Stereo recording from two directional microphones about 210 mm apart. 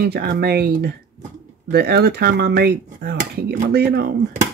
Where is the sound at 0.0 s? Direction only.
50° right (ahead or behind).